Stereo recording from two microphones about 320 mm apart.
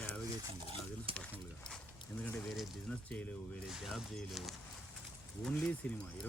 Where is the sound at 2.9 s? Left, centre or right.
Centre.